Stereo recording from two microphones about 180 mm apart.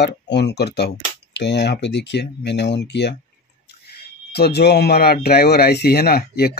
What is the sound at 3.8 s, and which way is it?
Speech, 60° left (ahead or behind).